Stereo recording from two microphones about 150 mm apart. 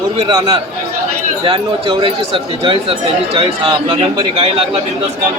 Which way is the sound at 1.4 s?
35° right (ahead or behind).